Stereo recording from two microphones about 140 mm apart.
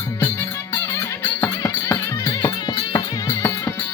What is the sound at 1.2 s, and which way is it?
Music, 15° left (ahead or behind).